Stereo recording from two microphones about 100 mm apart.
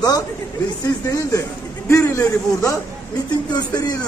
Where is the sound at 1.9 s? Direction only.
30° left (ahead or behind).